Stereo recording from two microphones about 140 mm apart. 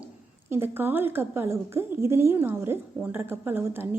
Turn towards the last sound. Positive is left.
turn(degrees=-15)  # may be behind; listen again after turning